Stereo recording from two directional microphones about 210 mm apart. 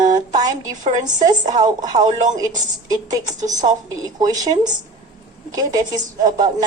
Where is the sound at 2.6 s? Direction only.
20° right (ahead or behind).